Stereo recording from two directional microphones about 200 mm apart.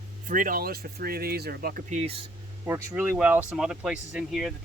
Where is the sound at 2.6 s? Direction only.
10° right (ahead or behind).